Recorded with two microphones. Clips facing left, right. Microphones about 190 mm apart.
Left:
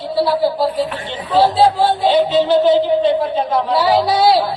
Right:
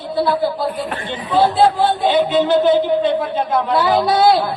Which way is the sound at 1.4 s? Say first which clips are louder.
Left 1 dB; 50° right (ahead or behind).